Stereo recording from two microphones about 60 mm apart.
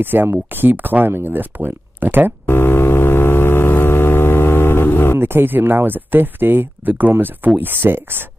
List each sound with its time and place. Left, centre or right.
0.0 s speech: right
2.4 s a sound: left
5.2 s speech: right